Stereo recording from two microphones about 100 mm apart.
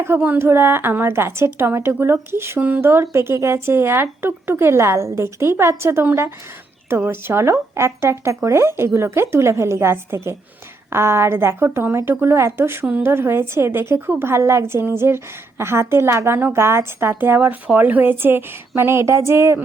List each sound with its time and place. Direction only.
0.2 s a woman's voice: 20° right (ahead or behind)
2.6 s speech: 10° right (ahead or behind)
2.8 s a woman's voice: 25° right (ahead or behind)